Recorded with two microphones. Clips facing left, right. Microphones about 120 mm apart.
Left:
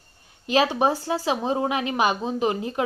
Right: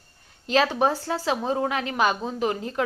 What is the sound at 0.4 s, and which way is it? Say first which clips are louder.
A woman's voice: left 1 dB; 15° left (ahead or behind).